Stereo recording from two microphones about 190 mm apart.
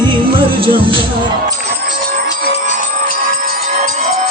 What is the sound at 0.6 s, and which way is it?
Speech, 30° right (ahead or behind).